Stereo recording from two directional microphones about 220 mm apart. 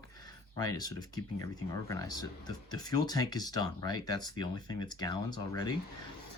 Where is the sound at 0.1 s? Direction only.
15° left (ahead or behind).